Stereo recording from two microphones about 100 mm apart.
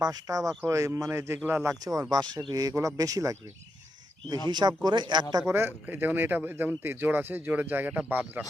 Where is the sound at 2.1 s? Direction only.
45° right (ahead or behind).